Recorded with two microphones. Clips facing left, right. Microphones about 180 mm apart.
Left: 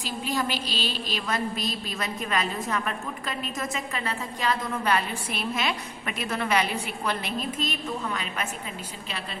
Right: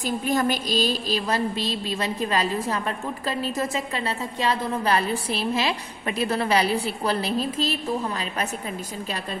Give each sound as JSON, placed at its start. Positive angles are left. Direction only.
{"t": 0.0, "sound": "a woman's voice", "side_deg": -50}